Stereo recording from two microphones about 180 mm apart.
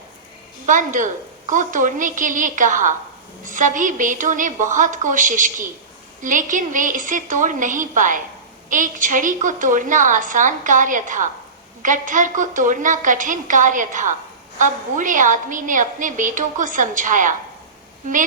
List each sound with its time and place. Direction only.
0.6 s a woman's voice: 45° right (ahead or behind)